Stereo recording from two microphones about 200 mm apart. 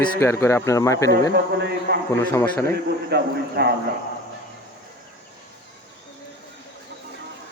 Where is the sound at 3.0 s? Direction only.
55° right (ahead or behind).